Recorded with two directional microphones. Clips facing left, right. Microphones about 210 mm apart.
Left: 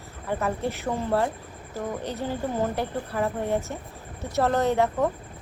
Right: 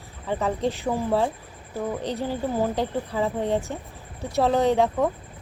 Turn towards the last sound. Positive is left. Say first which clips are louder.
# right 2 dB
turn(degrees=-15)  # may be behind; listen again after turning